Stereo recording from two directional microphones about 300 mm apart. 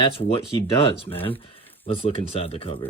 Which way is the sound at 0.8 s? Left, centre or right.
Centre.